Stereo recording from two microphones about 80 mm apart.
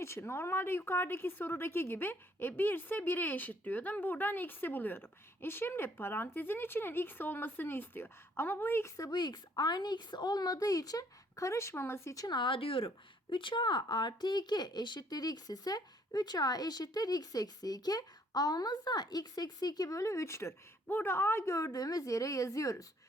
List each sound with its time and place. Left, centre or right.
0.0 s speech: left
9.1 s a woman's voice: left
12.1 s a woman's voice: left
13.3 s speech: left
20.8 s a woman's voice: left